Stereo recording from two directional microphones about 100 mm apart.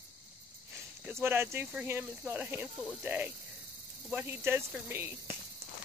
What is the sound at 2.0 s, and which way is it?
Speech, 15° right (ahead or behind).